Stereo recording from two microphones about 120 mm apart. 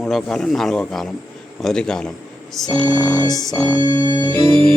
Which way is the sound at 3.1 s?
10° left (ahead or behind).